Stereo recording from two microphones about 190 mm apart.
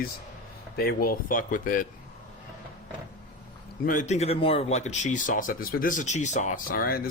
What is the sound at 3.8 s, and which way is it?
Speech, 40° left (ahead or behind).